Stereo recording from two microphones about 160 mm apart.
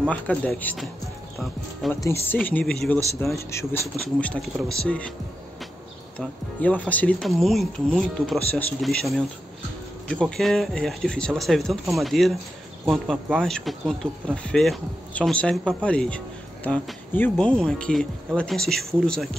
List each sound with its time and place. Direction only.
0.0 s speech: 10° left (ahead or behind)
2.0 s speech: 15° left (ahead or behind)
3.3 s speech: 15° left (ahead or behind)
4.0 s speech: 5° left (ahead or behind)
6.1 s speech: 10° left (ahead or behind)